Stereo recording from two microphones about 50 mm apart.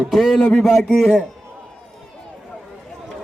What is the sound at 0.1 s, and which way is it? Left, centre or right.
A man's voice, centre.